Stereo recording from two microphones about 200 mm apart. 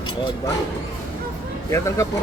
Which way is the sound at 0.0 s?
25° left (ahead or behind).